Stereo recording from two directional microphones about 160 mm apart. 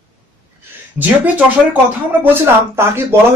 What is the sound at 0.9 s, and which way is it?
Speech, 10° right (ahead or behind).